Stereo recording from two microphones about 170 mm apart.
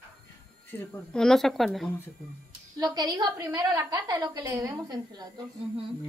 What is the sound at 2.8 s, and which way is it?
A woman's voice, 25° right (ahead or behind).